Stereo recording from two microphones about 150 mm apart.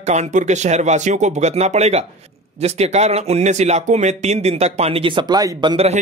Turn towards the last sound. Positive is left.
turn(degrees=-30)  # may be behind; listen again after turning